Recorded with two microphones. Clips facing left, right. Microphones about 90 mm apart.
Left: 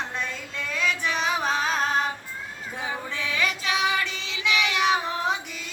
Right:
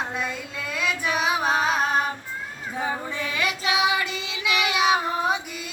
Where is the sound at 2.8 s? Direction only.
45° right (ahead or behind).